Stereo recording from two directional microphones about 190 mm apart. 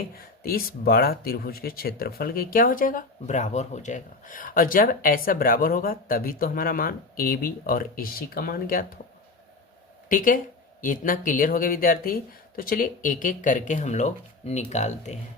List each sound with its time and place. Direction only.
0.4 s speech: 50° left (ahead or behind)
10.1 s speech: 45° left (ahead or behind)